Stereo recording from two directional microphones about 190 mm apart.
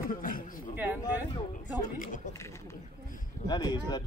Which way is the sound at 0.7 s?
10° right (ahead or behind).